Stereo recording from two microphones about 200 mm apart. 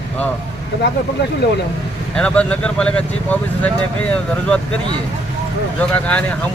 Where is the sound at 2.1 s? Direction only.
5° left (ahead or behind).